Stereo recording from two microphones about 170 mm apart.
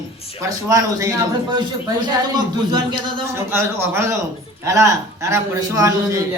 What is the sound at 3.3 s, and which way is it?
A man's voice, 15° right (ahead or behind).